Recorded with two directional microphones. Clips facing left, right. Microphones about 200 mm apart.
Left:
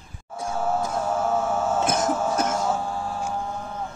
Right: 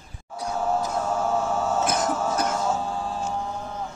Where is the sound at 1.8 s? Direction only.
25° left (ahead or behind).